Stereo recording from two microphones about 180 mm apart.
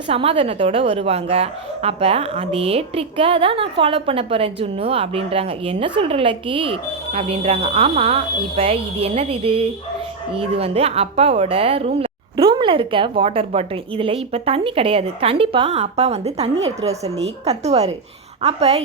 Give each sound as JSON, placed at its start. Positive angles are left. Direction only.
{"t": 0.1, "sound": "a woman's voice", "side_deg": -30}